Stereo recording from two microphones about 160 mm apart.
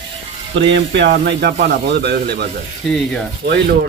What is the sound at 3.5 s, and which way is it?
Speech, 90° right.